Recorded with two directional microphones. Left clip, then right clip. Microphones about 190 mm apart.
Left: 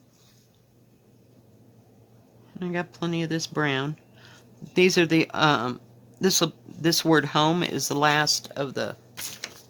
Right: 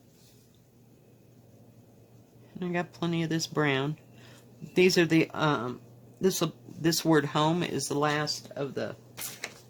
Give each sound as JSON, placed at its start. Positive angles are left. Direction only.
{"t": 2.6, "sound": "speech", "side_deg": 15}
{"t": 5.4, "sound": "speech", "side_deg": 35}